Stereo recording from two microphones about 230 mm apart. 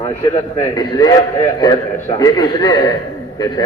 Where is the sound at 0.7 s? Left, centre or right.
Centre.